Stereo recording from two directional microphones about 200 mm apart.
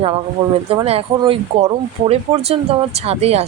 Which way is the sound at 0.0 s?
25° right (ahead or behind).